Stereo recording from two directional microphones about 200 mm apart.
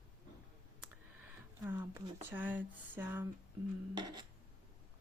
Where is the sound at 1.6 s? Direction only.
10° right (ahead or behind).